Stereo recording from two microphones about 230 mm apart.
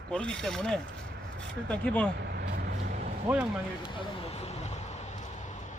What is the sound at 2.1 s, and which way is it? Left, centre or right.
Vehicle, right.